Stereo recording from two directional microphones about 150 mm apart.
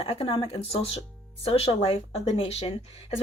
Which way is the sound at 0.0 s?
40° left (ahead or behind).